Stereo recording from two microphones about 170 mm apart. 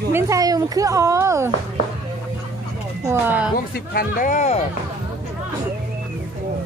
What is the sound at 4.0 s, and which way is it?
Speech, 50° left (ahead or behind).